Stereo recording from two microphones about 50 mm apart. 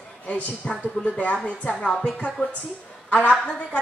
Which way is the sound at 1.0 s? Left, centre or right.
Left.